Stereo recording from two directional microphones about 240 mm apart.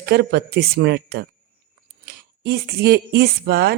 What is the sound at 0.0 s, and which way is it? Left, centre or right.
Speech, right.